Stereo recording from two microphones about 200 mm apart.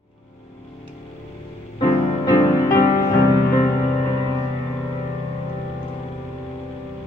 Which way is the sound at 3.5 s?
30° left (ahead or behind).